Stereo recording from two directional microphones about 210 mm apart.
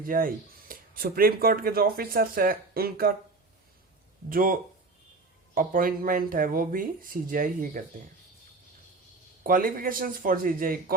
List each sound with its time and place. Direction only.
0.0 s speech: 40° right (ahead or behind)
4.3 s speech: 45° right (ahead or behind)
5.5 s speech: 40° right (ahead or behind)
9.4 s speech: 40° right (ahead or behind)